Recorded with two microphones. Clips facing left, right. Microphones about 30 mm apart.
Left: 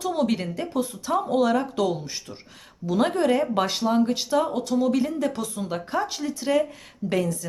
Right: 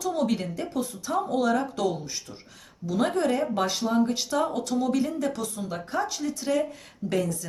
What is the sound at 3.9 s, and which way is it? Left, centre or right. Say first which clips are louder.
A woman's voice: left 3 dB; centre.